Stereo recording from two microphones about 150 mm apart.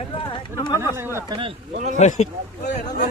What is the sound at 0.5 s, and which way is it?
Speech, 25° left (ahead or behind).